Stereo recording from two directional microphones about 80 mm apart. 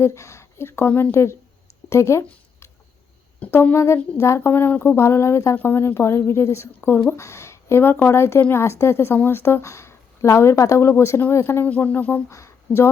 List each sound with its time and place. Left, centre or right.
0.0 s a woman's voice: left
3.4 s speech: left
3.8 s a woman's voice: left
7.2 s a woman's voice: left
11.6 s speech: left
12.3 s speech: left